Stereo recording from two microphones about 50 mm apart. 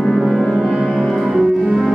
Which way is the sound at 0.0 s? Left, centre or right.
Centre.